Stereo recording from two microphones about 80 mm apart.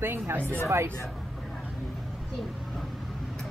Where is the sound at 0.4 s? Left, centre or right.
Centre.